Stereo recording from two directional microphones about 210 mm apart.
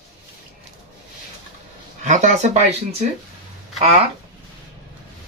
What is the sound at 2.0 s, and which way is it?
Speech, 35° right (ahead or behind).